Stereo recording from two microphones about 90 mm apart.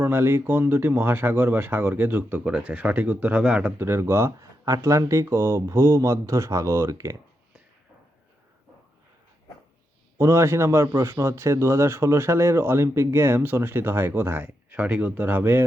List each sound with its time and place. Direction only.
0.0 s a man's voice: 25° right (ahead or behind)
3.8 s speech: 30° right (ahead or behind)
10.2 s a man's voice: 30° right (ahead or behind)